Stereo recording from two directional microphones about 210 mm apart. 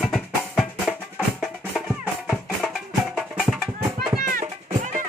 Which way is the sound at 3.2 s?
5° right (ahead or behind).